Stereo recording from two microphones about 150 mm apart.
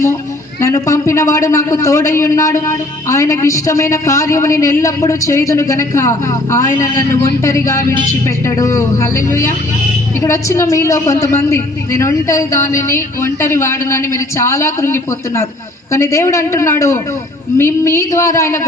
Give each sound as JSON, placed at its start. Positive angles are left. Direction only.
{"t": 0.6, "sound": "a man's voice", "side_deg": 20}